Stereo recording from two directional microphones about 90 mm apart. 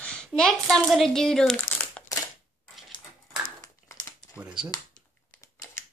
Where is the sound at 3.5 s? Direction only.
40° left (ahead or behind).